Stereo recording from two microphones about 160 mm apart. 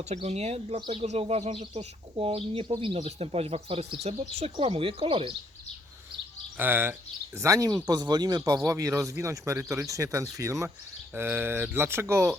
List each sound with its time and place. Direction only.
0.0 s speech: 45° right (ahead or behind)
6.6 s speech: 10° right (ahead or behind)